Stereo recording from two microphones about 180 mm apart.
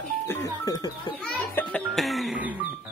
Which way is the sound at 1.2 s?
5° left (ahead or behind).